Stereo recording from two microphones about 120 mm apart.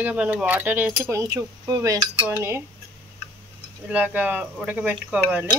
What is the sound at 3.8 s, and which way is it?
Speech, 15° right (ahead or behind).